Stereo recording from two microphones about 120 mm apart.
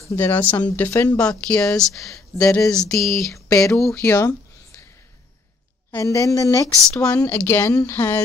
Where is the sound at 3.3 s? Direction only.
25° left (ahead or behind).